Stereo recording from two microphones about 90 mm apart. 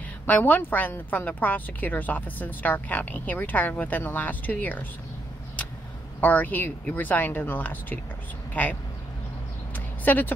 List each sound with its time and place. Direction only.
0.3 s a woman's voice: 20° left (ahead or behind)
6.2 s a woman's voice: 20° left (ahead or behind)
9.8 s a sound: 20° left (ahead or behind)